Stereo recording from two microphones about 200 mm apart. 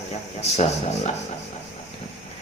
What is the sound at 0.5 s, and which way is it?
Speech, 30° left (ahead or behind).